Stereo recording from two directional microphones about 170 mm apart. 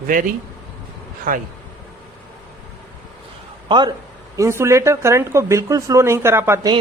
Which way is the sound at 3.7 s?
25° right (ahead or behind).